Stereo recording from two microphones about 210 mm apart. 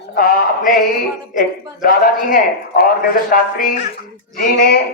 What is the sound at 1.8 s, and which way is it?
A man's voice, 45° left (ahead or behind).